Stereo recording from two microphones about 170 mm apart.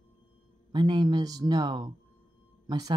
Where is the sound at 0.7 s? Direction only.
25° right (ahead or behind).